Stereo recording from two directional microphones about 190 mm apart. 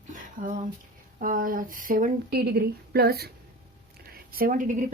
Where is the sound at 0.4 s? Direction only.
45° right (ahead or behind).